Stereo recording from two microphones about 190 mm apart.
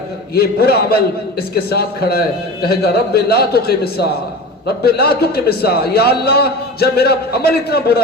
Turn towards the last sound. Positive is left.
turn(degrees=55)  # may be behind; listen again after turning